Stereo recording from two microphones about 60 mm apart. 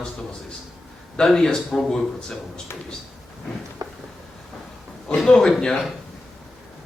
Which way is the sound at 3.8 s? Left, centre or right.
Right.